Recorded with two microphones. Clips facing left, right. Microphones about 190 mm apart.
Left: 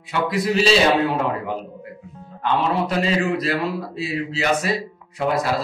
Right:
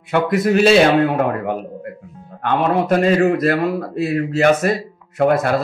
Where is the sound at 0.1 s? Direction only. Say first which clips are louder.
Right 5 dB; 55° right (ahead or behind).